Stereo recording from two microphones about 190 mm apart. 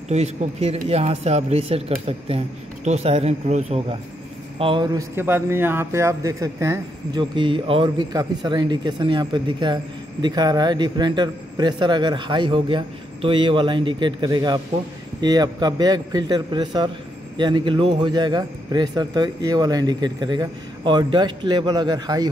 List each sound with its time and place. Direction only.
0.1 s a man's voice: 35° right (ahead or behind)
5.1 s speech: 10° right (ahead or behind)